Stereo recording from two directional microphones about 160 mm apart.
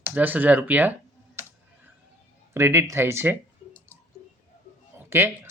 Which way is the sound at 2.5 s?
15° right (ahead or behind).